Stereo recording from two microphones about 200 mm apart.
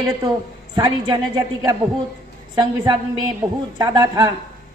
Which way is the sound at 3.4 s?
15° right (ahead or behind).